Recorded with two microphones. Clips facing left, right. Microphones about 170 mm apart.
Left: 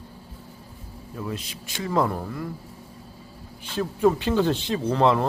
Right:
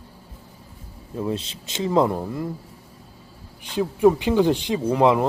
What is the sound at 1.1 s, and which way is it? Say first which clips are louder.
Speech: right 6 dB; 25° right (ahead or behind).